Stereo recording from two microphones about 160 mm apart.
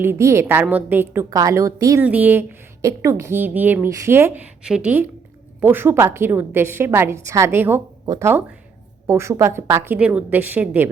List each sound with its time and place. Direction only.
0.0 s a woman's voice: 15° right (ahead or behind)